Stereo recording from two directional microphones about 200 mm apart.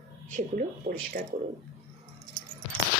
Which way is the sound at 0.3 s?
40° right (ahead or behind).